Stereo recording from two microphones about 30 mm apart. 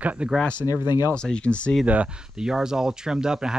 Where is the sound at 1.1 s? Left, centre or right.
Left.